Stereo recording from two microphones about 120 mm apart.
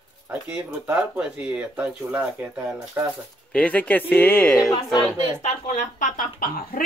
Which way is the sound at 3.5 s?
10° left (ahead or behind).